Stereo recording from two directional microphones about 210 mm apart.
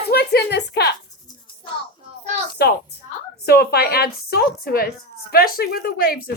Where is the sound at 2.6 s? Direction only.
50° left (ahead or behind).